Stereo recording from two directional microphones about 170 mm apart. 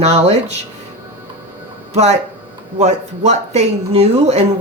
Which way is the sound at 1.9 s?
40° right (ahead or behind).